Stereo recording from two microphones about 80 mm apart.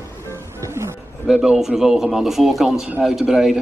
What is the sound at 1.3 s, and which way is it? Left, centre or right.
A man's voice, centre.